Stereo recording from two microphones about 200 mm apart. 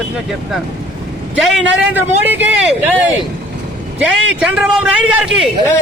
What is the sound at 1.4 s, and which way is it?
Speech, centre (ahead or behind).